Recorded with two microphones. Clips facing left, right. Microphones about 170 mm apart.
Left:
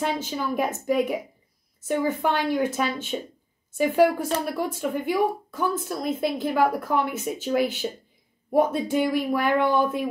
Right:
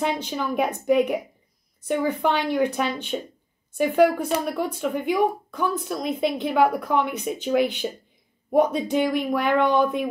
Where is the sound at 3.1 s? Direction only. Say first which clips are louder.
Right 1 dB; 5° left (ahead or behind).